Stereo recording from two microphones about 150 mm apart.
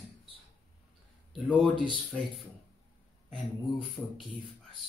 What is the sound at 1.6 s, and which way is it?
Speech, 35° left (ahead or behind).